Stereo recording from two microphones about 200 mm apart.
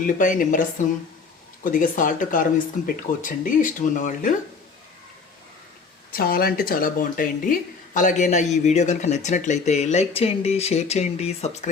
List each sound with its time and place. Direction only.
0.2 s speech: 40° left (ahead or behind)
6.1 s speech: 50° left (ahead or behind); by 11.7 s 35° left (ahead or behind)